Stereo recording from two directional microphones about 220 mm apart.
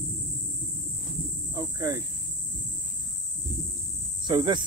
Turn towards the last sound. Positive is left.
turn(degrees=-20)  # may be behind; listen again after turning